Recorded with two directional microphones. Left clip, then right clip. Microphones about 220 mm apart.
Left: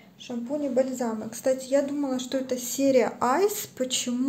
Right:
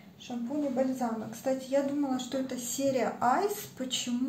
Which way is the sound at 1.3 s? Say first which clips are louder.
Left 7 dB; 50° left (ahead or behind).